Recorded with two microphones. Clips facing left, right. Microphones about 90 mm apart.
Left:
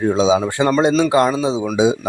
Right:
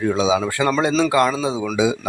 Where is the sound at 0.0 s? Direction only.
30° left (ahead or behind).